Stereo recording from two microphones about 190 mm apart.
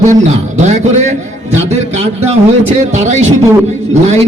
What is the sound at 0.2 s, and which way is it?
A man's voice, 35° right (ahead or behind).